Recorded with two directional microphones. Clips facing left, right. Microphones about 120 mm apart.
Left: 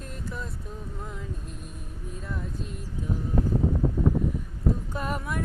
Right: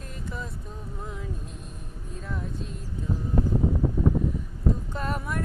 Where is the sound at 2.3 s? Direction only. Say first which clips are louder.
Right 1 dB; centre (ahead or behind).